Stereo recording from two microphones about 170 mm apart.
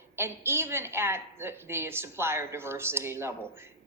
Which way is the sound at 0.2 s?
15° right (ahead or behind).